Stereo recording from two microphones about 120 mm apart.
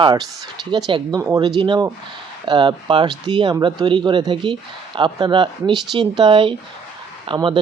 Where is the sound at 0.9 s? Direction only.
40° right (ahead or behind).